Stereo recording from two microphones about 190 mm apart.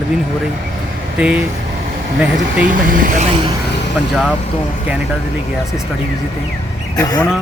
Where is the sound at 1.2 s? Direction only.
5° right (ahead or behind).